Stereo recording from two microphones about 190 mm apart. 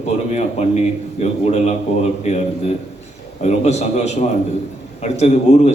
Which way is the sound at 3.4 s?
35° left (ahead or behind).